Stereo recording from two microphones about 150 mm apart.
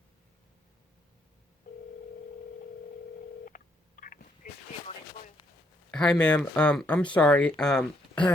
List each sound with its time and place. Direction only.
1.7 s telephone: 65° left (ahead or behind)
3.4 s telephone dialing: 65° left (ahead or behind)
5.9 s speech: 5° left (ahead or behind)